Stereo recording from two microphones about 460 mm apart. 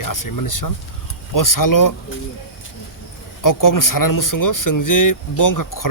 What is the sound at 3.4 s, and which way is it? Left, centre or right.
Speech, left.